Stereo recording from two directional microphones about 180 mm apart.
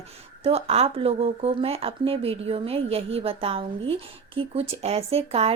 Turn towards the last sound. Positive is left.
turn(degrees=-35)  # may be behind; listen again after turning